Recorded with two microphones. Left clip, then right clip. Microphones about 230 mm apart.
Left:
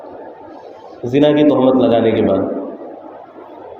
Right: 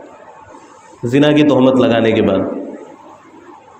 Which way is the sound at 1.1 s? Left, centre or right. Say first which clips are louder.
Even; right.